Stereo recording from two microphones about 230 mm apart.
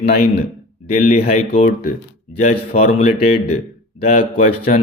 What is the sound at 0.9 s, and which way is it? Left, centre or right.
Speech, left.